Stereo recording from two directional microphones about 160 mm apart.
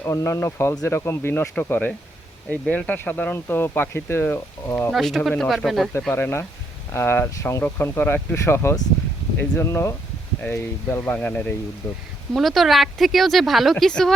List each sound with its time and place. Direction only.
0.0 s speech: 20° left (ahead or behind)
4.9 s a woman's voice: centre (ahead or behind); by 12.0 s 20° left (ahead or behind)
12.3 s a woman's voice: centre (ahead or behind)